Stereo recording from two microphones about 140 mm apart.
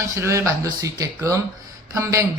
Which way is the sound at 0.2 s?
20° right (ahead or behind).